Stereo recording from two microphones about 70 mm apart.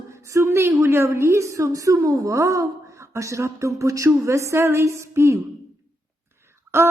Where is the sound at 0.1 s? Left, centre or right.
Right.